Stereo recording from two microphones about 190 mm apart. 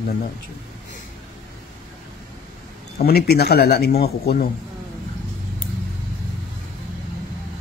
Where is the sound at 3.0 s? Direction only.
55° left (ahead or behind).